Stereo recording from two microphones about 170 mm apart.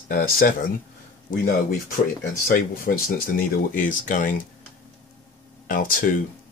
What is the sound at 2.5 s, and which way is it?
Speech, 55° left (ahead or behind).